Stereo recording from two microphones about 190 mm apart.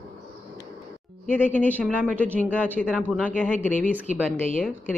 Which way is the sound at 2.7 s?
5° left (ahead or behind).